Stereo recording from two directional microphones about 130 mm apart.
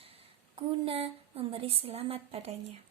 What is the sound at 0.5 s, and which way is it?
Speech, 45° right (ahead or behind).